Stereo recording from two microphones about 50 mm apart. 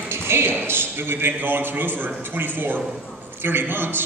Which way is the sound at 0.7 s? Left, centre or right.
Right.